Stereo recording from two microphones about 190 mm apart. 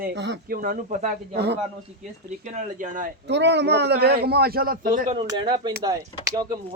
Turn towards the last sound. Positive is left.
turn(degrees=-20)  # may be behind; listen again after turning